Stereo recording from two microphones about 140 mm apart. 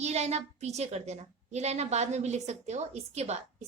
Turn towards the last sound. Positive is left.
turn(degrees=-50)  # may be behind; listen again after turning